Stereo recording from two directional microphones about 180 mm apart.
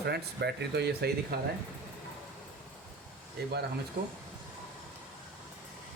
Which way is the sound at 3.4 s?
65° right (ahead or behind).